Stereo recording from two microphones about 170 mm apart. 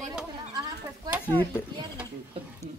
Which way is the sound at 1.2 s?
10° left (ahead or behind).